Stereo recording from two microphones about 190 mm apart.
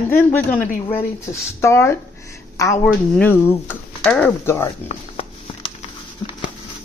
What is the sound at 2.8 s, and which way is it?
Speech, 5° left (ahead or behind).